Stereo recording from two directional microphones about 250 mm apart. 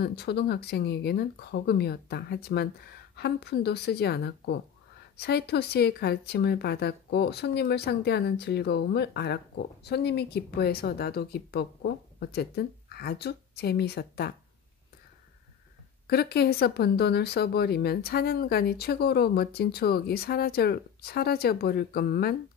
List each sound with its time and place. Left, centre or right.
0.0 s speech: left
16.1 s speech: left